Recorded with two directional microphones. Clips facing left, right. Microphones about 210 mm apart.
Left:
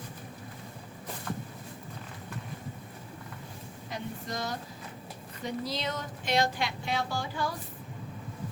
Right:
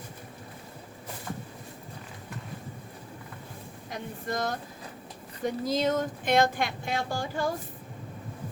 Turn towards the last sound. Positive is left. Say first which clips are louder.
# right 3 dB
turn(degrees=-50)  # may be behind; listen again after turning